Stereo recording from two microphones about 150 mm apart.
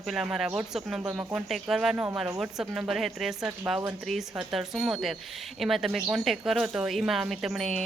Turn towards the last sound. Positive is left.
turn(degrees=0)  # may be behind; listen again after turning